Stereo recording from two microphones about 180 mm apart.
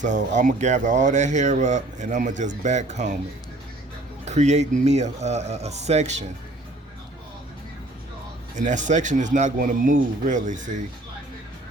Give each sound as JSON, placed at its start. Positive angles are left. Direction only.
{"t": 0.0, "sound": "speech", "side_deg": -45}
{"t": 4.3, "sound": "speech", "side_deg": -40}
{"t": 8.5, "sound": "speech", "side_deg": -45}